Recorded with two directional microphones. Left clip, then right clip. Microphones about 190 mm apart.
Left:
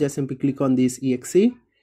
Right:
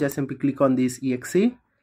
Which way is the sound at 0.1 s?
25° left (ahead or behind).